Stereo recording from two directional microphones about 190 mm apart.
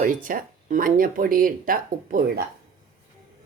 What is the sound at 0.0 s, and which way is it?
Speech, 45° right (ahead or behind).